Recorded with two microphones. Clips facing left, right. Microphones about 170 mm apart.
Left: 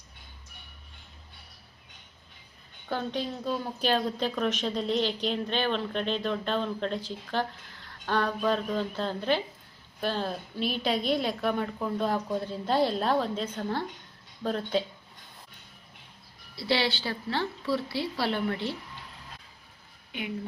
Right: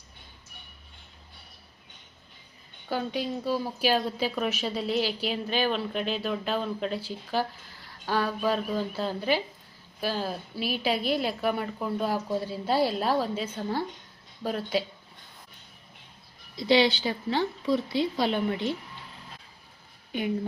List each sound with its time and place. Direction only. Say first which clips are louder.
2.9 s a woman's voice: right 2 dB; 5° right (ahead or behind)
16.6 s a woman's voice: right 6 dB; 20° right (ahead or behind)